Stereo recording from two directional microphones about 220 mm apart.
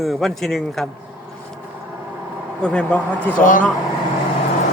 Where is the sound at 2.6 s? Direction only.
5° left (ahead or behind).